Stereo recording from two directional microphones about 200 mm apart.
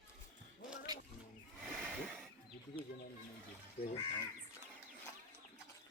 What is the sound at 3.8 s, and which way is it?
Crow, 30° left (ahead or behind).